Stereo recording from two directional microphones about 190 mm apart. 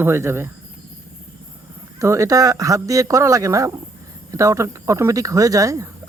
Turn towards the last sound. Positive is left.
turn(degrees=-15)  # may be behind; listen again after turning